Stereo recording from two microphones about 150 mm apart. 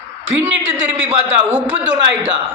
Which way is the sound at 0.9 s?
10° right (ahead or behind).